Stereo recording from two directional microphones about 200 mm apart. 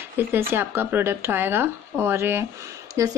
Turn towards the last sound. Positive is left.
turn(degrees=-15)  # may be behind; listen again after turning